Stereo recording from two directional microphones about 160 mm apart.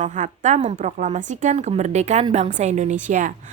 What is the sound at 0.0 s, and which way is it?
A woman's voice, 50° right (ahead or behind).